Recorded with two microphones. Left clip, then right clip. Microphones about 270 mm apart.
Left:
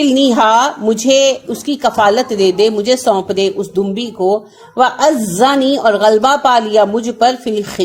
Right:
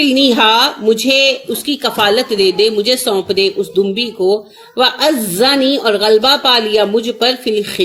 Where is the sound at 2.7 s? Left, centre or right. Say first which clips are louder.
Left 1 dB; left.